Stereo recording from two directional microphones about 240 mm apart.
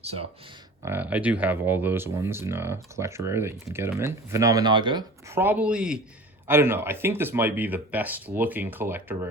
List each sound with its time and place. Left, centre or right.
0.0 s speech: right
0.8 s speech: centre